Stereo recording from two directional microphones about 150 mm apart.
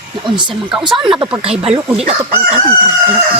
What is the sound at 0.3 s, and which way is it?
Speech, 30° right (ahead or behind).